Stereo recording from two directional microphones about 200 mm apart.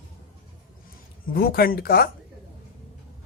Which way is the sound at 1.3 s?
50° left (ahead or behind).